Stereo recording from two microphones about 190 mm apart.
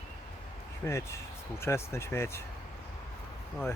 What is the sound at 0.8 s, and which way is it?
Speech, 15° left (ahead or behind).